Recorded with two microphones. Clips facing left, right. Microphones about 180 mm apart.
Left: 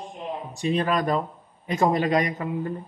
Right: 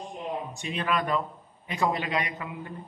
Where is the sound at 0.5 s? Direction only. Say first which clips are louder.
Left 8 dB; 35° left (ahead or behind).